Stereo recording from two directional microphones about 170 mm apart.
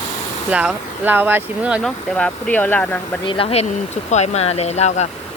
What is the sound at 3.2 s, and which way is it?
Speech, 35° left (ahead or behind).